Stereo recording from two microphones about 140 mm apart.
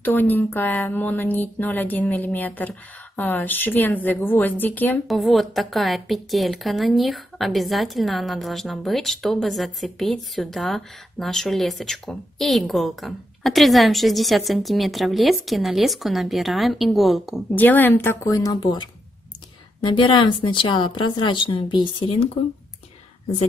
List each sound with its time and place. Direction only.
0.0 s speech: 15° left (ahead or behind)
5.0 s a woman's voice: centre (ahead or behind)
17.6 s a woman's voice: 15° left (ahead or behind); by 22.3 s 40° left (ahead or behind)